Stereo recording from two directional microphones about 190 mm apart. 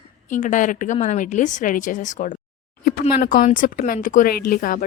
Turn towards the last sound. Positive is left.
turn(degrees=45)  # may be behind; listen again after turning